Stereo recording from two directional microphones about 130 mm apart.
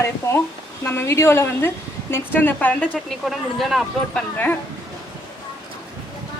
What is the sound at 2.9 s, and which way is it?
Speech, centre (ahead or behind).